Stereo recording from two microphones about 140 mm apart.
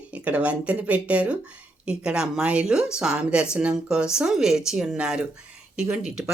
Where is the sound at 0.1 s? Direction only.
10° right (ahead or behind).